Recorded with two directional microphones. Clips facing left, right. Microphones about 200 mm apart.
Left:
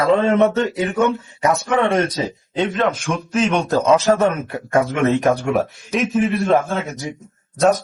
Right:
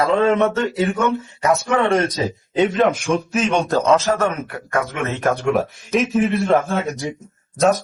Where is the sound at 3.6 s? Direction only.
Centre (ahead or behind).